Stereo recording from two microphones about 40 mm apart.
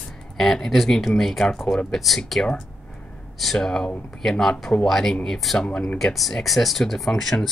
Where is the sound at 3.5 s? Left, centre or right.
Centre.